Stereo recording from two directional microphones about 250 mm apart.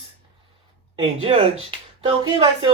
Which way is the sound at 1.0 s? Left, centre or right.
Right.